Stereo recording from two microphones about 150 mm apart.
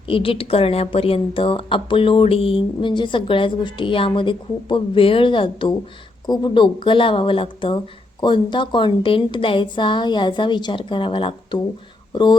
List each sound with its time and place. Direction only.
0.1 s a woman's voice: 35° left (ahead or behind)